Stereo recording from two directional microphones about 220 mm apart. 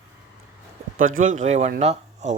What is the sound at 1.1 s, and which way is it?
Speech, 35° right (ahead or behind).